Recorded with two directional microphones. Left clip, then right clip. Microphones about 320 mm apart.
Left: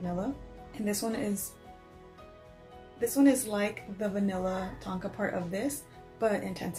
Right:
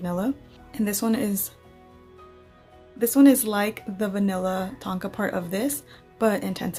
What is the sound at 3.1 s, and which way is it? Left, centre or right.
A woman's voice, right.